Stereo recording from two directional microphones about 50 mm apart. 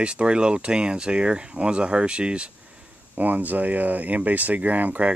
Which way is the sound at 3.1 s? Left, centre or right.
Right.